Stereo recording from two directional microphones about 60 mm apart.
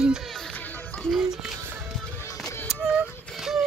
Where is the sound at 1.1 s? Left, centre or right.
Centre.